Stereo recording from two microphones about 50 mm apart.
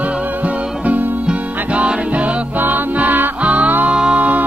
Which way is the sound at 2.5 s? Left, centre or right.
Right.